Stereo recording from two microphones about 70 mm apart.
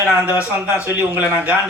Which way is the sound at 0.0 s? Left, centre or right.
Right.